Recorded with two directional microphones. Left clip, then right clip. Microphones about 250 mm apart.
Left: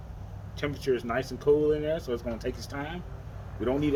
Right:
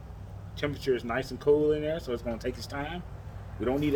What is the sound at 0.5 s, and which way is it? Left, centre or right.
Speech, centre.